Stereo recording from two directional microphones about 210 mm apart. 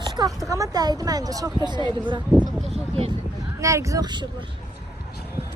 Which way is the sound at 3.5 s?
15° right (ahead or behind).